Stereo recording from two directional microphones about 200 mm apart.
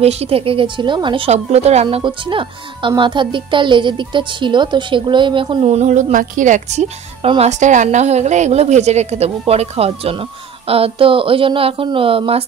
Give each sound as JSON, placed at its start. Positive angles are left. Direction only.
{"t": 0.0, "sound": "a woman's voice", "side_deg": -30}